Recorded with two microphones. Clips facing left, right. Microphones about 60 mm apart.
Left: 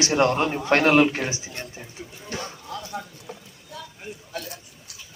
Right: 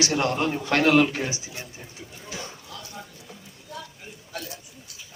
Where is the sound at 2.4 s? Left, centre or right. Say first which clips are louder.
Left 6 dB; left.